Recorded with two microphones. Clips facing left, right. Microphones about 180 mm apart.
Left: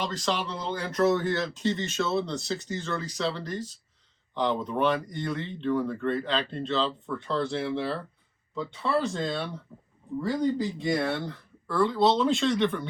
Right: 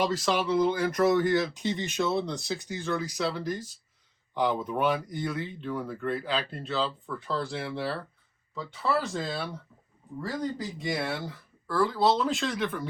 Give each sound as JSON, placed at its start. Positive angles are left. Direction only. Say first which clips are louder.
{"t": 0.0, "sound": "speech", "louder": "right 3 dB", "side_deg": -5}